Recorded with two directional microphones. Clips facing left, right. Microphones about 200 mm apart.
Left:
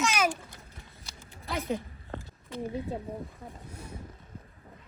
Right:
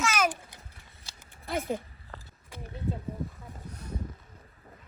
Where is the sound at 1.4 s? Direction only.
50° right (ahead or behind).